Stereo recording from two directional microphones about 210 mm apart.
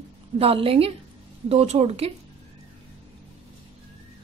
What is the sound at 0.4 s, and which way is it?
A woman's voice, 25° right (ahead or behind).